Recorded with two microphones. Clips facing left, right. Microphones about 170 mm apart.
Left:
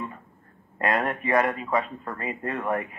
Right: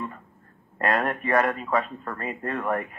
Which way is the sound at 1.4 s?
5° left (ahead or behind).